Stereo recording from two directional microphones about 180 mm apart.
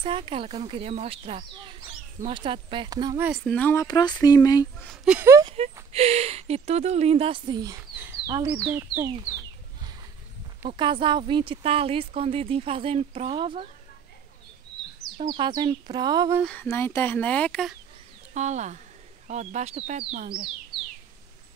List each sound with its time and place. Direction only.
0.0 s speech: 30° right (ahead or behind)
3.2 s speech: 5° right (ahead or behind)
3.4 s speech: 10° left (ahead or behind)
3.8 s speech: 20° left (ahead or behind)
4.8 s speech: 5° right (ahead or behind)
5.4 s speech: 30° right (ahead or behind); by 9.1 s 15° right (ahead or behind)
10.8 s speech: 25° right (ahead or behind)
15.1 s speech: 25° right (ahead or behind)
16.4 s speech: 10° left (ahead or behind)
18.3 s speech: 40° right (ahead or behind)